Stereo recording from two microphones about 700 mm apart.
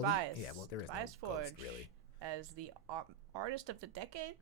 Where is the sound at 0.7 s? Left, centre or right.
Left.